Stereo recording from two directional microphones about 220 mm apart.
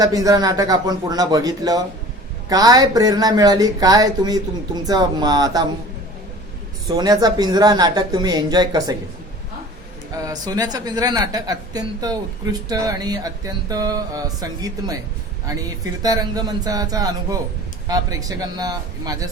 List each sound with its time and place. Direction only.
0.0 s speech: 15° right (ahead or behind)
6.8 s speech: 20° right (ahead or behind)
10.2 s speech: 15° right (ahead or behind)